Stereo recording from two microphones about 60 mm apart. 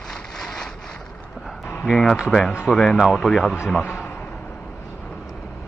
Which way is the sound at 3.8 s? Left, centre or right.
Left.